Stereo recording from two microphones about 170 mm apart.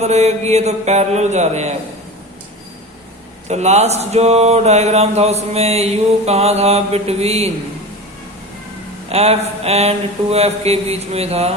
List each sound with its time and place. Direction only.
0.0 s mantra: 40° right (ahead or behind)
3.5 s mantra: 40° right (ahead or behind)
9.0 s mantra: 35° right (ahead or behind)